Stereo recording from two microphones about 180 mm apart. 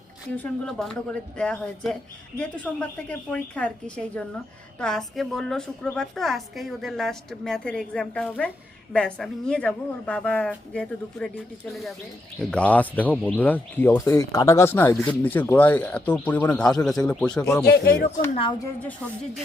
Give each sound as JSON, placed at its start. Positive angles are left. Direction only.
{"t": 0.3, "sound": "a woman's voice", "side_deg": 5}
{"t": 17.7, "sound": "speech", "side_deg": 60}
{"t": 18.6, "sound": "speech", "side_deg": 10}